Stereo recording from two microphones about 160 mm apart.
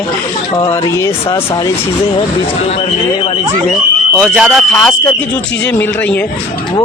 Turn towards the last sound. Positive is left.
turn(degrees=5)  # may be behind; listen again after turning